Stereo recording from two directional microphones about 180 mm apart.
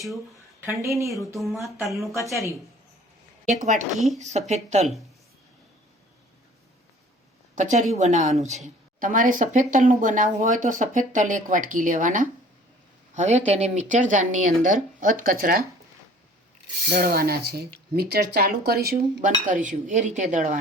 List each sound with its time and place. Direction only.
0.6 s speech: 15° right (ahead or behind)
1.4 s speech: centre (ahead or behind)
2.1 s a woman's voice: 15° left (ahead or behind)
3.4 s a woman's voice: 45° right (ahead or behind)
3.9 s speech: centre (ahead or behind)
4.2 s speech: 40° right (ahead or behind)
7.5 s a woman's voice: 45° right (ahead or behind)
16.9 s speech: 60° right (ahead or behind)
19.3 s a woman's voice: 45° right (ahead or behind)